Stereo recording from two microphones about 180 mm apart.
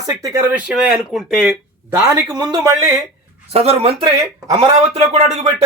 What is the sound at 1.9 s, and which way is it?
Speech, 20° right (ahead or behind).